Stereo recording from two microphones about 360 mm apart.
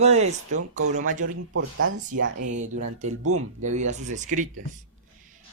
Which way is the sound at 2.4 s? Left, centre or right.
Centre.